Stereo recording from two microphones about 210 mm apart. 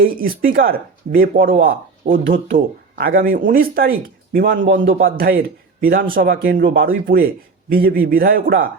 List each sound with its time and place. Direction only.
0.0 s speech: 45° right (ahead or behind)